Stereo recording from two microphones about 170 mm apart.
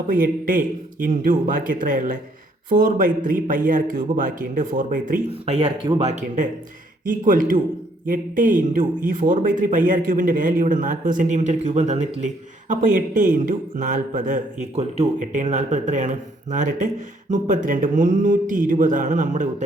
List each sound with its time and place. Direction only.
0.1 s a man's voice: 55° right (ahead or behind)
5.5 s speech: 35° right (ahead or behind)
6.1 s a man's voice: 45° right (ahead or behind)